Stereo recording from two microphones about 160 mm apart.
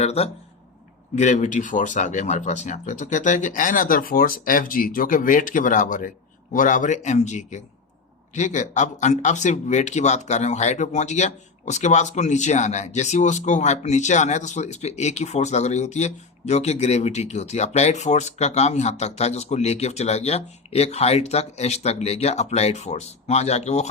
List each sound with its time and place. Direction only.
0.0 s speech: 40° left (ahead or behind)